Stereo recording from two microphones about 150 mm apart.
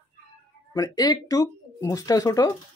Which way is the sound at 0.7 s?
25° left (ahead or behind).